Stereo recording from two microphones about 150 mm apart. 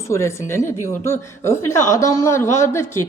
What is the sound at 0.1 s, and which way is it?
A man's voice, 20° left (ahead or behind).